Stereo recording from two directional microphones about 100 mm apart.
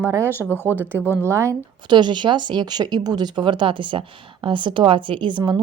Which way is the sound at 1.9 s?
50° right (ahead or behind).